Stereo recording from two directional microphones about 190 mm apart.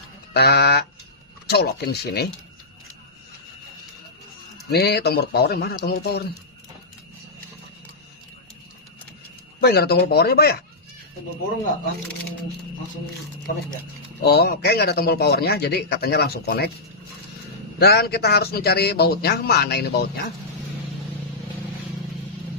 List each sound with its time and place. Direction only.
0.3 s a man's voice: 55° left (ahead or behind)
4.6 s a man's voice: 55° left (ahead or behind)
9.6 s a man's voice: 55° left (ahead or behind)
14.2 s a man's voice: 55° left (ahead or behind)
17.7 s a man's voice: 55° left (ahead or behind)